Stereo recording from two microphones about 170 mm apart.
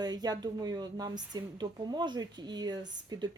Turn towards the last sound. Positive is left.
turn(degrees=-25)  # may be behind; listen again after turning